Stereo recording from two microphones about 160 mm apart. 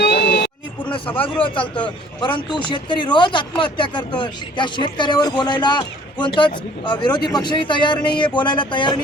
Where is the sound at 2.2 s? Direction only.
30° left (ahead or behind).